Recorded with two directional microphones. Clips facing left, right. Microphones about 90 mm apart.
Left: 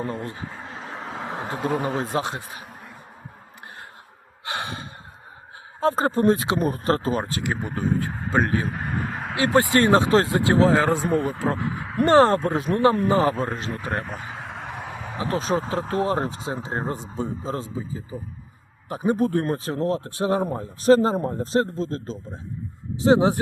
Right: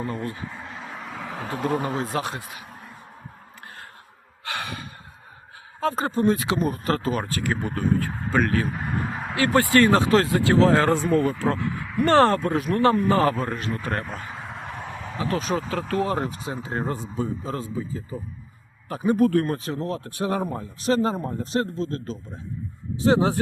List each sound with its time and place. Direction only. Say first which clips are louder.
0.0 s a sound: even; 25° left (ahead or behind)
1.6 s speech: even; centre (ahead or behind)
2.0 s speech: left 2 dB; 25° left (ahead or behind)
4.4 s gasp: left 1 dB; 25° left (ahead or behind)
5.8 s speech: left 3 dB; 35° left (ahead or behind)
8.7 s a sound: even; centre (ahead or behind)
9.3 s speech: even; 20° left (ahead or behind)
10.7 s speech: even; 5° left (ahead or behind)
11.4 s speech: even; 30° left (ahead or behind)
12.0 s speech: left 2 dB; 20° left (ahead or behind)
14.0 s a sound: even; 5° left (ahead or behind)
15.0 s speech: left 1 dB; 20° left (ahead or behind)
20.1 s speech: left 3 dB; 25° left (ahead or behind)
23.0 s speech: left 2 dB; 20° left (ahead or behind)